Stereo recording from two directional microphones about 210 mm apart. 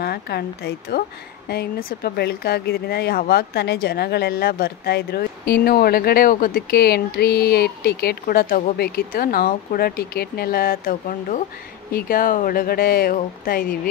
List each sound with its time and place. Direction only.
0.0 s speech: 50° left (ahead or behind)